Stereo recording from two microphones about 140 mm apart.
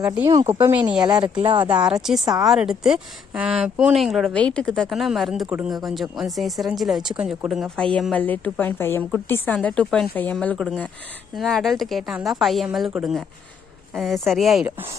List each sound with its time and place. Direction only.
0.3 s speech: 20° right (ahead or behind)
1.0 s speech: 30° right (ahead or behind)
1.8 s speech: 5° right (ahead or behind)
2.2 s speech: 25° right (ahead or behind)
2.5 s speech: 5° right (ahead or behind)
8.1 s speech: 10° left (ahead or behind)